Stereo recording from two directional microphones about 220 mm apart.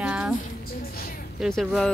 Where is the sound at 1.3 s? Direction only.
Centre (ahead or behind).